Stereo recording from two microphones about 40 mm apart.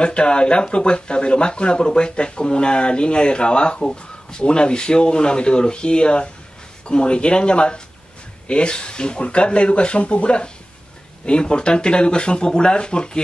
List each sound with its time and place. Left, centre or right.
0.0 s speech: left